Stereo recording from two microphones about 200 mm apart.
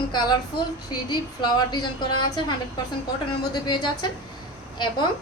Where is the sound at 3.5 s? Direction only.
20° left (ahead or behind).